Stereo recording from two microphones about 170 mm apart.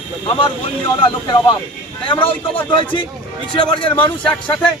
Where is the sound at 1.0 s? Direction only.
30° left (ahead or behind).